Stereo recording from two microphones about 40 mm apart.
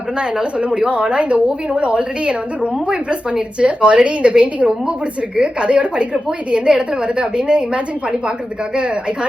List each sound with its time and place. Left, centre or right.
0.2 s a woman's voice: right